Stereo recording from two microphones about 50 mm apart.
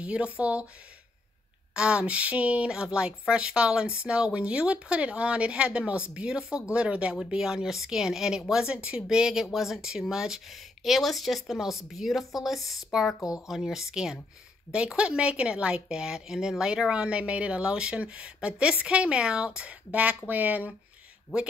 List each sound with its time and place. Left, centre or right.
0.0 s speech: right
1.7 s speech: right
7.2 s speech: centre
8.6 s speech: right
9.1 s speech: centre
15.0 s speech: right